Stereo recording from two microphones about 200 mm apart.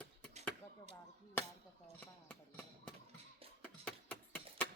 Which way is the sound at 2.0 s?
10° left (ahead or behind).